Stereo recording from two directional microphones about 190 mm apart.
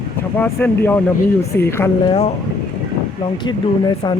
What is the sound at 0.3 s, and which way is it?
Speech, 10° left (ahead or behind).